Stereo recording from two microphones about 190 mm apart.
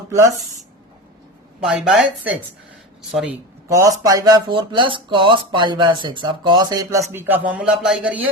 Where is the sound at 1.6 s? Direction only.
5° right (ahead or behind).